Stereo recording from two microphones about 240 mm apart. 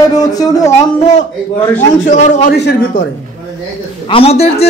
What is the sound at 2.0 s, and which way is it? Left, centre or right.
Speech, left.